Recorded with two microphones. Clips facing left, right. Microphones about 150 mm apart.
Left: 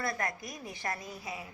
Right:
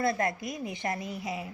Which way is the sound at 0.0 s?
25° right (ahead or behind).